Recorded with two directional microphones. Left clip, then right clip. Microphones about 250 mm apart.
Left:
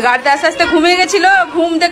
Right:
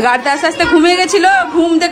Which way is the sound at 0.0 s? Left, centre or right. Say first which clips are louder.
Left 1 dB; centre.